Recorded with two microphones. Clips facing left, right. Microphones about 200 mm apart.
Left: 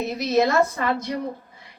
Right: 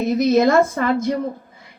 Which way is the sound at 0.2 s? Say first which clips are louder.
Right 5 dB; 50° right (ahead or behind).